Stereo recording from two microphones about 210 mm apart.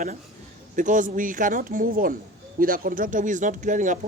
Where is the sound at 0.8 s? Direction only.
35° right (ahead or behind).